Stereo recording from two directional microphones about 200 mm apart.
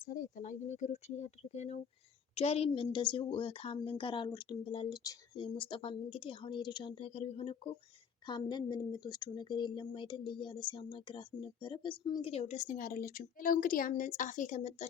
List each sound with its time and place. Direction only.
0.0 s speech: 40° left (ahead or behind)